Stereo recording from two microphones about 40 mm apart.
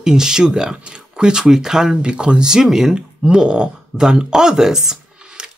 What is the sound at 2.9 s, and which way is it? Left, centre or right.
Speech, right.